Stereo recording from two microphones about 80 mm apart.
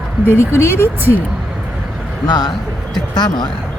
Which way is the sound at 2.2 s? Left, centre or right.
Left.